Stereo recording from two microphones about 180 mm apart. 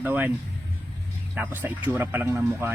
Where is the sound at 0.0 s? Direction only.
10° right (ahead or behind).